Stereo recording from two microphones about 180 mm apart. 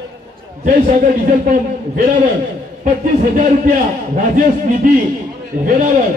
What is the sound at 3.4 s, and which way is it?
Speech, 45° right (ahead or behind).